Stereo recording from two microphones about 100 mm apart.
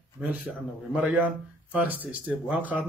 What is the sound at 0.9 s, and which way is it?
Speech, 10° right (ahead or behind).